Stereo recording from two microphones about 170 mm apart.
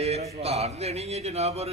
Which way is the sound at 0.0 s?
40° right (ahead or behind).